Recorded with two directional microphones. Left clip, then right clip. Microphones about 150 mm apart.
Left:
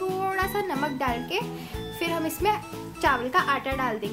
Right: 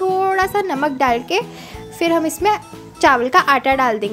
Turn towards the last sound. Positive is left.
turn(degrees=-55)  # may be behind; listen again after turning